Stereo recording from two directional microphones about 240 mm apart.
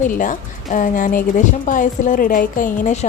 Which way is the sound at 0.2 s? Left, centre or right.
Left.